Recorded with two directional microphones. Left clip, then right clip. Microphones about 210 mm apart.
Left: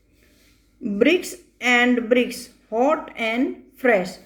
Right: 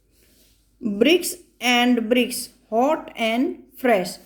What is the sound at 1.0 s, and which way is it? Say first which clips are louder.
A woman's voice: even; 30° right (ahead or behind).